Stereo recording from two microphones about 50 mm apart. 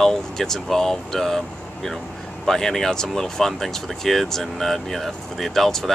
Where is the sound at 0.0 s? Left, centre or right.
Centre.